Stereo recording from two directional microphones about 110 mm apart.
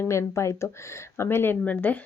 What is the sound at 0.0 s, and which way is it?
Speech, 25° left (ahead or behind).